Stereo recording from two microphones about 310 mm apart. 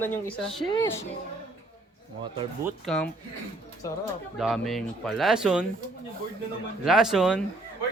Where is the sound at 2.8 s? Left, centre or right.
Centre.